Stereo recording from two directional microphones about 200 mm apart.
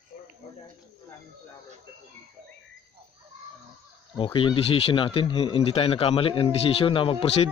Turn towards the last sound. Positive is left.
turn(degrees=25)  # may be behind; listen again after turning